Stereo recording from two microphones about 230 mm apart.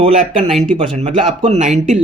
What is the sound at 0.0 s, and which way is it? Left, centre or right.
Speech, right.